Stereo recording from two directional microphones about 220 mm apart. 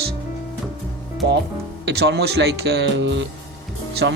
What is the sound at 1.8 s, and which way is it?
Speech, 50° right (ahead or behind).